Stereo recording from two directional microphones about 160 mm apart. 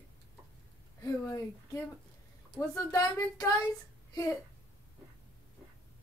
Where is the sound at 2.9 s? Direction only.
20° left (ahead or behind).